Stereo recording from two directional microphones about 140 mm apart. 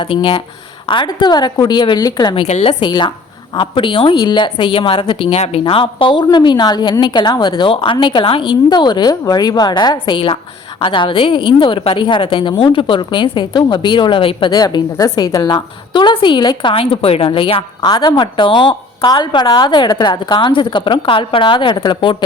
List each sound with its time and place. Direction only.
0.0 s a woman's voice: 40° left (ahead or behind)
2.5 s a woman's voice: 50° left (ahead or behind)
2.8 s a woman's voice: 35° left (ahead or behind)
14.5 s a woman's voice: 30° left (ahead or behind)